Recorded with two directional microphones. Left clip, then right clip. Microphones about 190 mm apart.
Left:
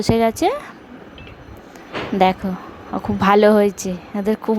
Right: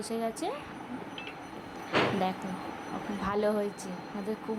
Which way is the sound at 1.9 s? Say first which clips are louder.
Even; centre (ahead or behind).